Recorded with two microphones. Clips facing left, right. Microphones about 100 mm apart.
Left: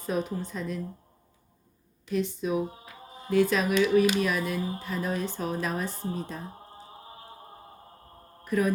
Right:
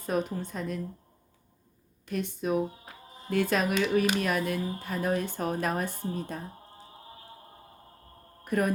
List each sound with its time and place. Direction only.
0.0 s speech: 50° right (ahead or behind)
2.0 s speech: 50° right (ahead or behind)
6.0 s speech: 30° left (ahead or behind)
6.4 s a sound: 25° left (ahead or behind)
8.4 s mantra: 55° right (ahead or behind)